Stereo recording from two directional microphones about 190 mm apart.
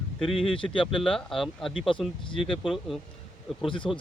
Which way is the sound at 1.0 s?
Centre (ahead or behind).